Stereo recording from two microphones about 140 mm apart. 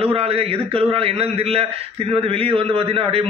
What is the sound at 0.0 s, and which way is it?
A man's voice, 45° right (ahead or behind).